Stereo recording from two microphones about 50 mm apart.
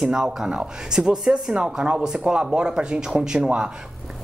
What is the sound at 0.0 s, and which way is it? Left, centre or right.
Speech, centre.